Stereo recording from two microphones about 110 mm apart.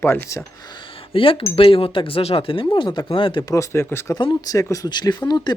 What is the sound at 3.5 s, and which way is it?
Speech, 20° left (ahead or behind).